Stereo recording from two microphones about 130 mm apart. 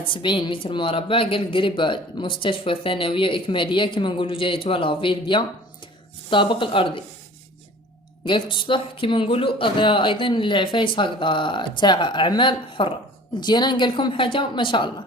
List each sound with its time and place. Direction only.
0.1 s speech: 40° left (ahead or behind)
8.2 s speech: 40° left (ahead or behind)